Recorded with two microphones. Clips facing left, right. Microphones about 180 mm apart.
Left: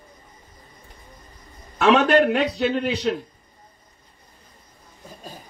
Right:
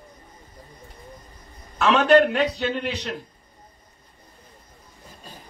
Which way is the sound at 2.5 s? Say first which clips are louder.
Left 4 dB; 35° left (ahead or behind).